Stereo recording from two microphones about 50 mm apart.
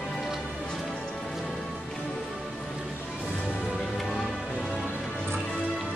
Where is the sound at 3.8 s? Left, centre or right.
Centre.